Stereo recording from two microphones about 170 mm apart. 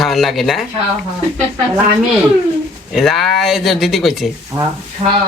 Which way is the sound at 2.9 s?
Centre (ahead or behind).